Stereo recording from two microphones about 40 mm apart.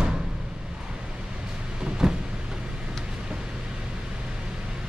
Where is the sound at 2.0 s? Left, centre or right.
Centre.